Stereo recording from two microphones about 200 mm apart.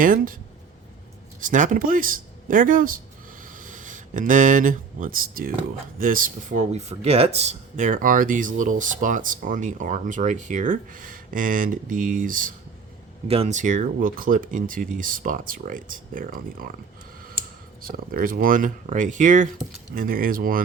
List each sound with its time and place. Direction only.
0.0 s speech: 45° right (ahead or behind)
1.4 s speech: 40° right (ahead or behind)
13.2 s speech: 30° right (ahead or behind); by 16.7 s 45° right (ahead or behind)
17.8 s speech: 45° right (ahead or behind)